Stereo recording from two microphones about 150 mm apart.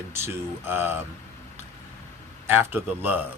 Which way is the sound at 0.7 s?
15° right (ahead or behind).